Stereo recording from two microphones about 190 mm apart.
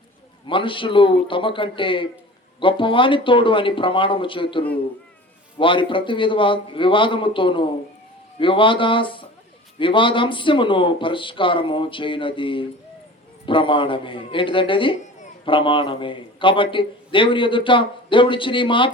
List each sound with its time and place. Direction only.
0.4 s a man's voice: 25° left (ahead or behind)